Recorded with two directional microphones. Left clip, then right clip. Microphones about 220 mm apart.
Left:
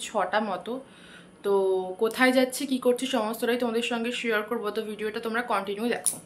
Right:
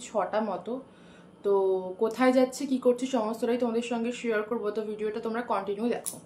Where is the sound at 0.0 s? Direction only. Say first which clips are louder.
Left 2 dB; centre (ahead or behind).